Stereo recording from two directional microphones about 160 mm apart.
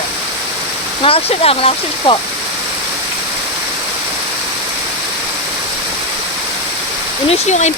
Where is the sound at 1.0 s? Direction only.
35° left (ahead or behind).